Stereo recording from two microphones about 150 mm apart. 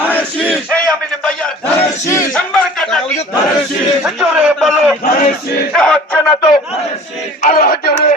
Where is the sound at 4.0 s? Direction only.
Centre (ahead or behind).